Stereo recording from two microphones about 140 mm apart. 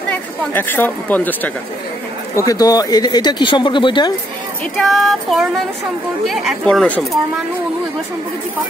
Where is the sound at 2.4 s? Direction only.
25° left (ahead or behind).